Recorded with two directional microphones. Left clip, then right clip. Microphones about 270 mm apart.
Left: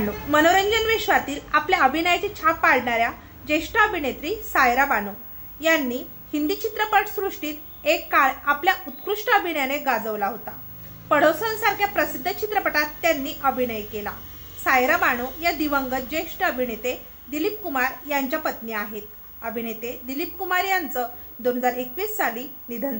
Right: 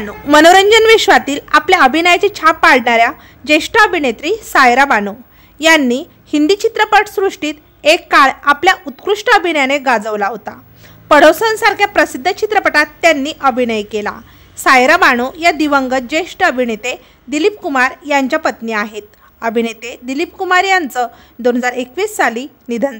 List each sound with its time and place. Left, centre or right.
0.3 s a woman's voice: right